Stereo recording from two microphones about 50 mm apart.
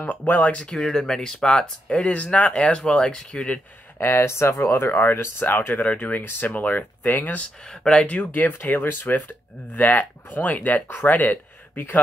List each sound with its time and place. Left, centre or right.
0.0 s speech: left
0.7 s speech: centre
4.0 s speech: left
4.9 s speech: left
5.8 s speech: left
7.8 s speech: centre
8.3 s speech: left